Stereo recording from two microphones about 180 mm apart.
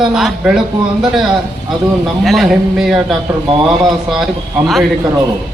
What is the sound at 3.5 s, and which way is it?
Speech, 30° right (ahead or behind).